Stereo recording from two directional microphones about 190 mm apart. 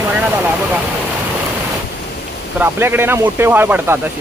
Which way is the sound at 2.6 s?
10° right (ahead or behind).